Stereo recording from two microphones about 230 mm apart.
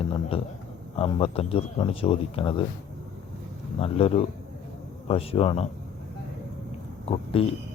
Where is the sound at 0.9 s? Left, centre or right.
Left.